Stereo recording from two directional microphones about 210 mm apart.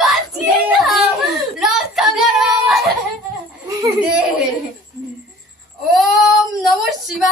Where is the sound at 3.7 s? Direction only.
15° right (ahead or behind).